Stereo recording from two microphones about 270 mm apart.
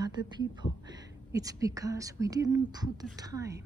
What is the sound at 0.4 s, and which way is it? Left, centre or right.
A woman's voice, centre.